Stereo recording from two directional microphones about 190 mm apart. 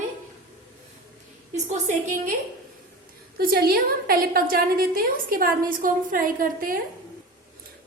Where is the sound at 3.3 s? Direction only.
55° right (ahead or behind).